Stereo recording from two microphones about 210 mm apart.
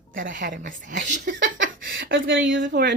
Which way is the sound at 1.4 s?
60° right (ahead or behind).